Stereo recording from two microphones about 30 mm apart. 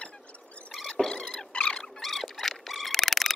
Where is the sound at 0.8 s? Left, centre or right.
Centre.